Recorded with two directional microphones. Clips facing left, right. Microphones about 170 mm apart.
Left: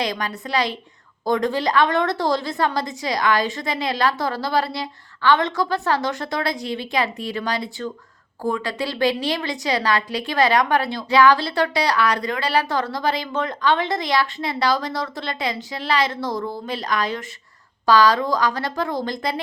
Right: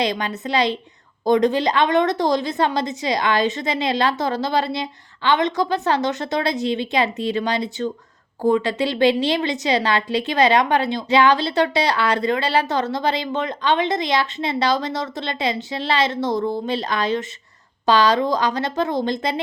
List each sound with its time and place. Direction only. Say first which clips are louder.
0.0 s a woman's voice: right 3 dB; 25° right (ahead or behind)